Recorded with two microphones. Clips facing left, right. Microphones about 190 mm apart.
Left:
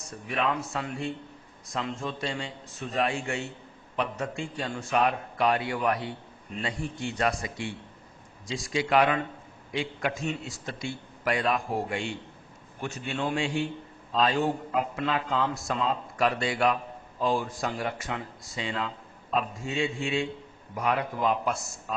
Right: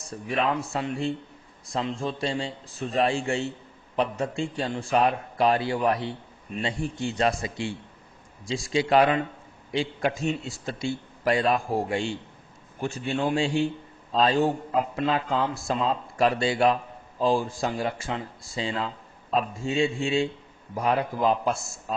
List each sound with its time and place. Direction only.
0.3 s a man's voice: 30° right (ahead or behind)